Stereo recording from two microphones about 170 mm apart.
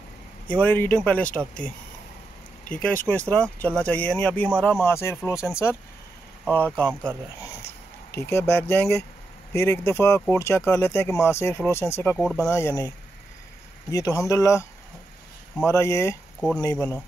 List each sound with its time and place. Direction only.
0.5 s speech: 10° left (ahead or behind)
2.7 s speech: 10° left (ahead or behind)
16.3 s speech: centre (ahead or behind)